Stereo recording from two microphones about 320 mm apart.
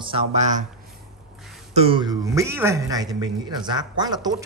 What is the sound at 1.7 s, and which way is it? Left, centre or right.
Speech, centre.